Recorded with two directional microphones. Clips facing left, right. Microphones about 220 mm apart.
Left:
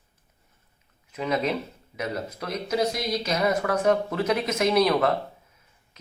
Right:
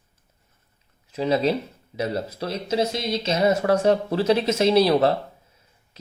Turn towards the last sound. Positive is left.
turn(degrees=-30)  # may be behind; listen again after turning